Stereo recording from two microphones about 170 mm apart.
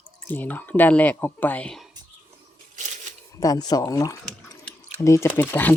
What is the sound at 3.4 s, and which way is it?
Speech, 20° left (ahead or behind).